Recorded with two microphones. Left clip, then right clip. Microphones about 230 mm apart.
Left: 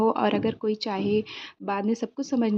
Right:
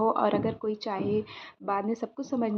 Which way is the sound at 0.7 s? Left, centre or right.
Left.